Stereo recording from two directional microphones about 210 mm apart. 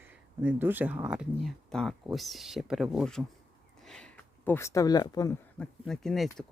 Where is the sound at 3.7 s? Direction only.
Centre (ahead or behind); by 5.3 s 20° left (ahead or behind).